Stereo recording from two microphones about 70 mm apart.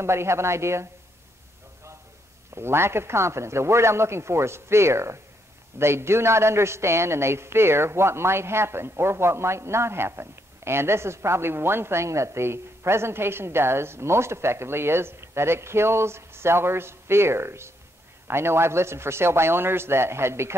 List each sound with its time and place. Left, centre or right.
0.0 s a man's voice: right
2.5 s a man's voice: right